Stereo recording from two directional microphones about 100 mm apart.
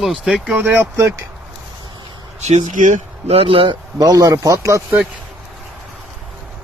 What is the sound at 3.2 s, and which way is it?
Speech, 75° right (ahead or behind).